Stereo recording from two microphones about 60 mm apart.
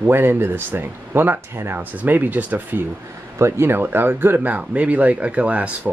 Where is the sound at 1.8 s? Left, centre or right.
Right.